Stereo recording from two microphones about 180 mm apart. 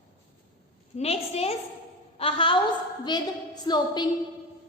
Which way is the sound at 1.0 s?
35° left (ahead or behind).